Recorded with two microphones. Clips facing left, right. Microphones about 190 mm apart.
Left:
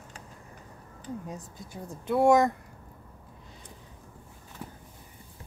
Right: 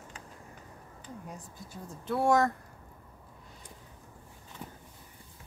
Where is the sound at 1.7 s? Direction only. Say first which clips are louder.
Left 4 dB; 15° left (ahead or behind).